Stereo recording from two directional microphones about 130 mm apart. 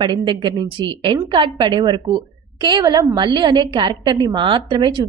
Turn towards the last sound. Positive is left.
turn(degrees=-40)  # may be behind; listen again after turning